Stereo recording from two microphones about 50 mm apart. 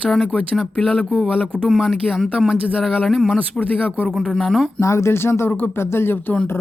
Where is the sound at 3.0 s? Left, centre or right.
Centre.